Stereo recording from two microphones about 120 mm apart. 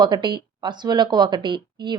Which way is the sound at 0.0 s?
40° right (ahead or behind).